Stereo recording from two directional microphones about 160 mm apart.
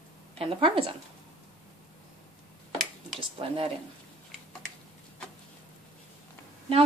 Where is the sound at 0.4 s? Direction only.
35° right (ahead or behind).